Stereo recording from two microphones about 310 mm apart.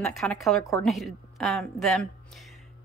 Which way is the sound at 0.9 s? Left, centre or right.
Centre.